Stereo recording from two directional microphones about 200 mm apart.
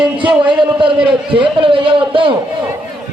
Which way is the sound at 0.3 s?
25° right (ahead or behind).